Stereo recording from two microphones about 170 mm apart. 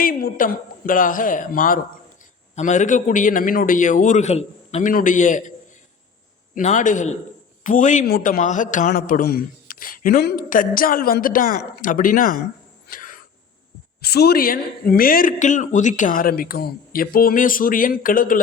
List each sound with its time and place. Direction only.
0.0 s a man's voice: 60° left (ahead or behind)
6.5 s a man's voice: 45° left (ahead or behind)
12.9 s a sound: 50° left (ahead or behind)
14.0 s a woman's voice: 70° left (ahead or behind); by 18.3 s 55° left (ahead or behind)